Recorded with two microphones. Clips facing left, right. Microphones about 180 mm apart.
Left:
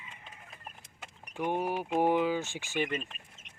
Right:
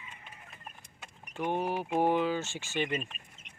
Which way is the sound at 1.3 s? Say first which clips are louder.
Even; 10° left (ahead or behind).